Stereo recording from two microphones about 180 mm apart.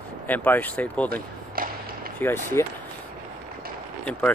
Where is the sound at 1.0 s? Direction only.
55° right (ahead or behind).